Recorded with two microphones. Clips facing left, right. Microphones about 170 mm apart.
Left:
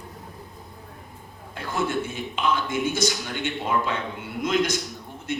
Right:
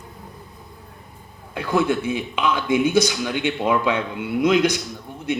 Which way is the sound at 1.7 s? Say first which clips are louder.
Right 6 dB; 60° right (ahead or behind).